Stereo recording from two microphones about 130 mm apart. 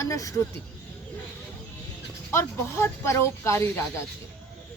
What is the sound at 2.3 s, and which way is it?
Speech, 20° left (ahead or behind).